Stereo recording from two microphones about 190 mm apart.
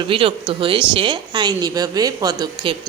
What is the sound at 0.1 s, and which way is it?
Speech, 25° right (ahead or behind).